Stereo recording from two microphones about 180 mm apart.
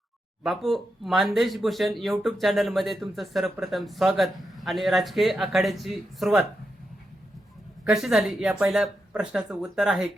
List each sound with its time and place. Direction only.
0.4 s speech: centre (ahead or behind)
7.9 s speech: centre (ahead or behind)